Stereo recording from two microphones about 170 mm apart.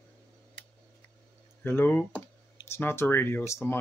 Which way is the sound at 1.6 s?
15° left (ahead or behind).